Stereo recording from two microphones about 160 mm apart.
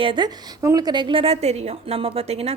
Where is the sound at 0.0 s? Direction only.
30° right (ahead or behind).